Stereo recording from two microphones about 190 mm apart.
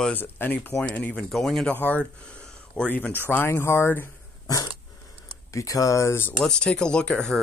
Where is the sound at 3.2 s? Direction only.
10° left (ahead or behind).